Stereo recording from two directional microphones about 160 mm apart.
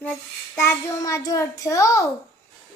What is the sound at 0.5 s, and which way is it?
A woman's voice, 20° left (ahead or behind).